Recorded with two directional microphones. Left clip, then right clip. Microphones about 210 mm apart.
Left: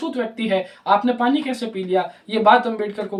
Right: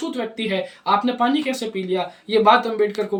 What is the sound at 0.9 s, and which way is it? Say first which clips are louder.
Speech: left 1 dB; 15° left (ahead or behind).